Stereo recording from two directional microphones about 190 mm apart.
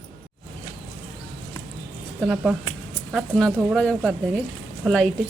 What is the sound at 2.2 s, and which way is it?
Speech, 5° right (ahead or behind).